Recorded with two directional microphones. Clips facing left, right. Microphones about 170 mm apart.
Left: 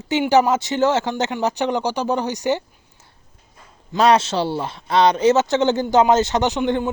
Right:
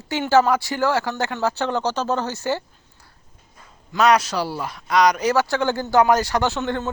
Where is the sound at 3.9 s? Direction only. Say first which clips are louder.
Left 2 dB; 25° left (ahead or behind).